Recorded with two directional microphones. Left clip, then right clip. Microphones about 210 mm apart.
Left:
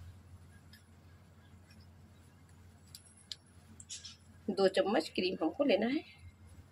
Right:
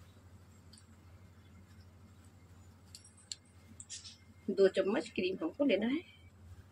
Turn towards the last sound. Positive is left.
turn(degrees=35)  # may be behind; listen again after turning